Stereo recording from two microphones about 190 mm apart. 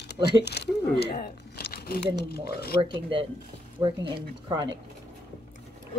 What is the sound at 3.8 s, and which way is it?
Speech, 25° right (ahead or behind).